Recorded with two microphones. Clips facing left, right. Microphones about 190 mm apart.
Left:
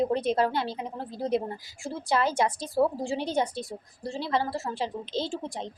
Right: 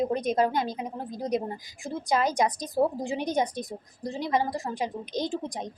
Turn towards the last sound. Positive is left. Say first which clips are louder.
# right 2 dB
turn(degrees=-15)  # may be behind; listen again after turning